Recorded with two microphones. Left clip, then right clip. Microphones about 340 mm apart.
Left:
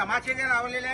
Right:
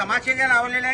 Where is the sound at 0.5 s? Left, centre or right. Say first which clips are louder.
Right 7 dB; centre.